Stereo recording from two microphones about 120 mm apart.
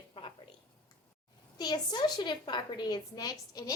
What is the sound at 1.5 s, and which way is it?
A woman's voice, 35° left (ahead or behind).